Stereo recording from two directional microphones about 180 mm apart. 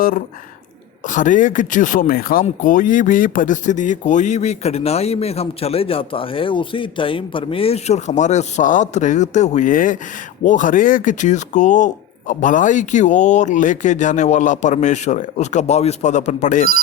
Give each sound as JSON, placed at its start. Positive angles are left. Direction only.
{"t": 1.0, "sound": "speech", "side_deg": 45}